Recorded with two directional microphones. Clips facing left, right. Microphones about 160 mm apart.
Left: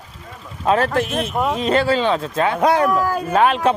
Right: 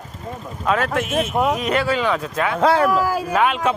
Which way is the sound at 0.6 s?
35° left (ahead or behind).